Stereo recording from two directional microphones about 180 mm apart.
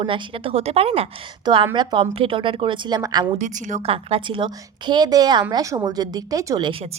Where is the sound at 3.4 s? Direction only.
45° right (ahead or behind).